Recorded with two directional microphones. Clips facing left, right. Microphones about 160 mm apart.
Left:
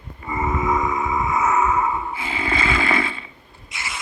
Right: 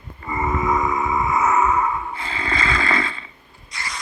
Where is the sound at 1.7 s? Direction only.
20° left (ahead or behind).